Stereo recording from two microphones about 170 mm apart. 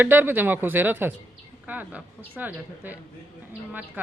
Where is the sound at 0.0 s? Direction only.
10° right (ahead or behind).